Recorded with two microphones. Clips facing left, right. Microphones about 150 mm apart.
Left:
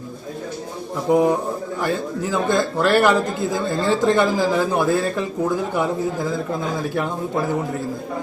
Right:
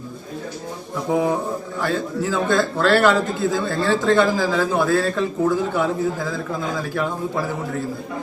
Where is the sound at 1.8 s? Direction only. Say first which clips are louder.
Right 1 dB; 15° left (ahead or behind).